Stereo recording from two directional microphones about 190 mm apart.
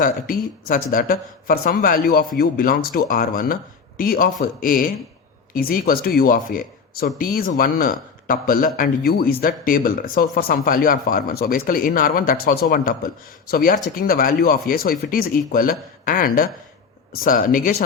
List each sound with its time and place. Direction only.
0.0 s speech: 45° left (ahead or behind)